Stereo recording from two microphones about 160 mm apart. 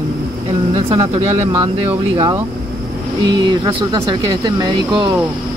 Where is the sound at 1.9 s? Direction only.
20° right (ahead or behind).